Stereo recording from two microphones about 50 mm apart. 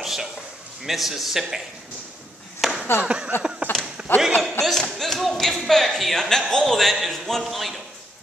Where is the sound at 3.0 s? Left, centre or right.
Right.